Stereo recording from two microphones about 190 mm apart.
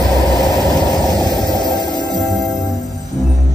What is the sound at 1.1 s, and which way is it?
Music, 20° right (ahead or behind).